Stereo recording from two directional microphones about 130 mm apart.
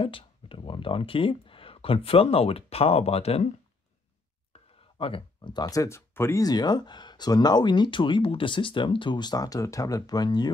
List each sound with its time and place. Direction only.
0.0 s speech: 45° left (ahead or behind)
4.5 s a sound: 45° left (ahead or behind); by 6.4 s 20° left (ahead or behind)
6.4 s speech: 30° left (ahead or behind)